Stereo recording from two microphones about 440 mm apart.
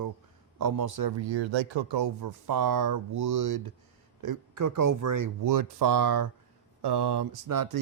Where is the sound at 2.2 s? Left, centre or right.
Right.